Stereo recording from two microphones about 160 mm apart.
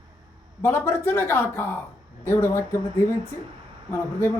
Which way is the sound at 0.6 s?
15° left (ahead or behind).